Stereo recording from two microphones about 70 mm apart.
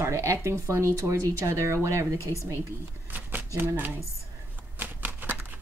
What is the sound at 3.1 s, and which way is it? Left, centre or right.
Shuffling cards, right.